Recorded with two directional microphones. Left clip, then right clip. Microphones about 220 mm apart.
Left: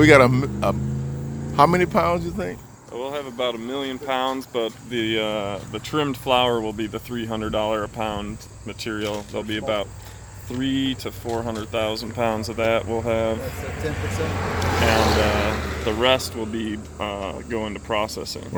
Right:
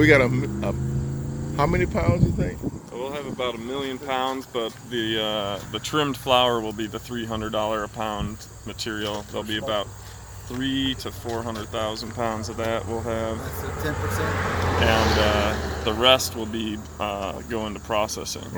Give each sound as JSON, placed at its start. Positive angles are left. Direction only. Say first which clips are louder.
{"t": 0.0, "sound": "speech", "louder": "left 4 dB", "side_deg": 25}
{"t": 2.9, "sound": "speech", "louder": "left 4 dB", "side_deg": 55}
{"t": 4.9, "sound": "speech", "louder": "left 1 dB", "side_deg": 25}
{"t": 14.1, "sound": "speech", "louder": "right 2 dB", "side_deg": 0}
{"t": 15.0, "sound": "speech", "louder": "left 1 dB", "side_deg": 45}
{"t": 15.9, "sound": "speech", "louder": "right 1 dB", "side_deg": 10}